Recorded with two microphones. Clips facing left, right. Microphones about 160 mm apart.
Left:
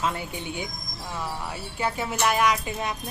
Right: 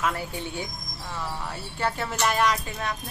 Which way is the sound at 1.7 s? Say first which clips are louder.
Even; 10° left (ahead or behind).